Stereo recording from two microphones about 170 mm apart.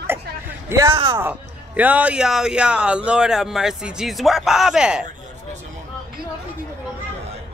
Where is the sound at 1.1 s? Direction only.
10° right (ahead or behind).